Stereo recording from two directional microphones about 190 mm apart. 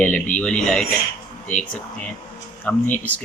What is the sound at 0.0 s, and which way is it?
A man's voice, 5° left (ahead or behind).